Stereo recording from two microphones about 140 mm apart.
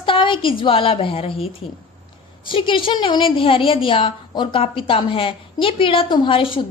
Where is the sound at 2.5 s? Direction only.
40° left (ahead or behind).